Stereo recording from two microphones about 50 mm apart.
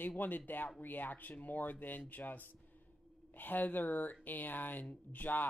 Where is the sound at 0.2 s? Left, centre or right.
Left.